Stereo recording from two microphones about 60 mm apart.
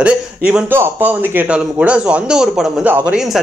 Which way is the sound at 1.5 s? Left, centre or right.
Centre.